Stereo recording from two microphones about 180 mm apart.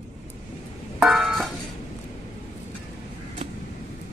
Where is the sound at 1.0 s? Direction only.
Centre (ahead or behind).